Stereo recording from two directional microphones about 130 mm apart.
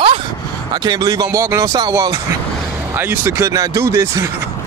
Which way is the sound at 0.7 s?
30° right (ahead or behind).